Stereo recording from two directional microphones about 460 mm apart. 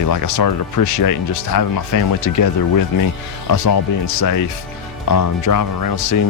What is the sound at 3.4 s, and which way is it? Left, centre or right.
Speech, left.